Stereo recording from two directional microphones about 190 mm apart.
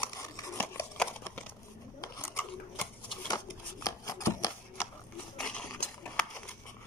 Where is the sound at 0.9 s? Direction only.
10° left (ahead or behind).